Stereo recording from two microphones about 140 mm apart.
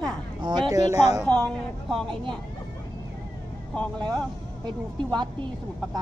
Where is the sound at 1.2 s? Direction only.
10° left (ahead or behind).